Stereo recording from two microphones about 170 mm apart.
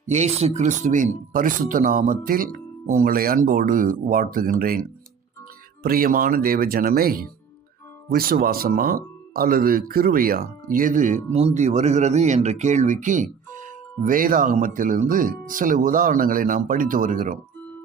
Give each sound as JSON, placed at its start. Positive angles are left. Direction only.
{"t": 0.1, "sound": "speech", "side_deg": -40}